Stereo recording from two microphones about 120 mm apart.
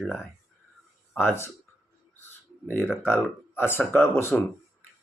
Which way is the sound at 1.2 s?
20° left (ahead or behind).